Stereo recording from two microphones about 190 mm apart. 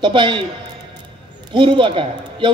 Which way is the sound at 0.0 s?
25° right (ahead or behind).